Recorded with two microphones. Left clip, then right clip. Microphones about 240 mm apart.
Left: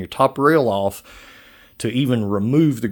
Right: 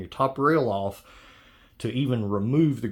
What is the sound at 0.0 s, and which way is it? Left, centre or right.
Speech, left.